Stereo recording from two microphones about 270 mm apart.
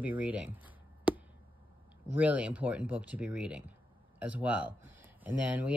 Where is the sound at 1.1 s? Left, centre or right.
Centre.